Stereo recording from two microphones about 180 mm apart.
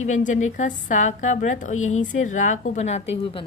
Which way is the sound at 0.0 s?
45° left (ahead or behind).